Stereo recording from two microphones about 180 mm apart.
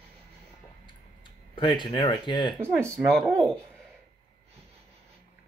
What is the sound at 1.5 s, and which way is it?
Speech, 25° left (ahead or behind).